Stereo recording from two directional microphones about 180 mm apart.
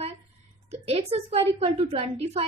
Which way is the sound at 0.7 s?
35° right (ahead or behind).